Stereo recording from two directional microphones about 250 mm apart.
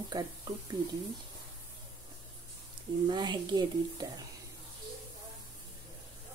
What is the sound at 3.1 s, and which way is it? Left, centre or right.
Speech, centre.